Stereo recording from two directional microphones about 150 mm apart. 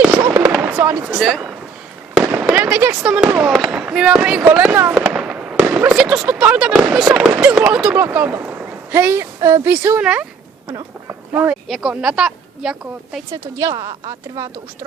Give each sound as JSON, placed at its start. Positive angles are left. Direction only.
{"t": 0.4, "sound": "fireworks", "side_deg": -5}
{"t": 1.2, "sound": "a woman's voice", "side_deg": 0}
{"t": 10.7, "sound": "speech", "side_deg": -25}
{"t": 11.3, "sound": "speech", "side_deg": -5}
{"t": 13.3, "sound": "a woman's voice", "side_deg": -25}